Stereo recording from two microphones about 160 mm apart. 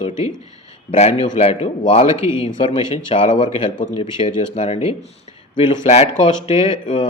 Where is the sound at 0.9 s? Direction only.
40° left (ahead or behind).